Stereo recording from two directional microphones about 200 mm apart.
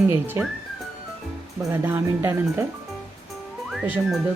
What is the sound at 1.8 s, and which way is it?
Speech, 15° right (ahead or behind).